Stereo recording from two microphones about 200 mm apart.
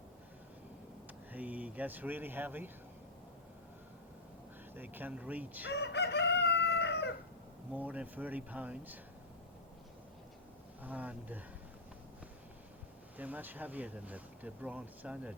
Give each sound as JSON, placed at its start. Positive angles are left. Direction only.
{"t": 1.3, "sound": "speech", "side_deg": -10}
{"t": 4.7, "sound": "speech", "side_deg": -10}
{"t": 5.7, "sound": "chicken", "side_deg": 55}
{"t": 7.7, "sound": "speech", "side_deg": -10}
{"t": 10.8, "sound": "speech", "side_deg": -5}
{"t": 13.1, "sound": "speech", "side_deg": -10}